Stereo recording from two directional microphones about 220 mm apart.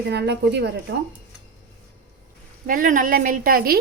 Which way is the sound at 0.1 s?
50° right (ahead or behind).